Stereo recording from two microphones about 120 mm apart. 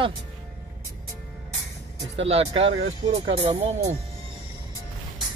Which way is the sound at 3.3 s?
50° right (ahead or behind).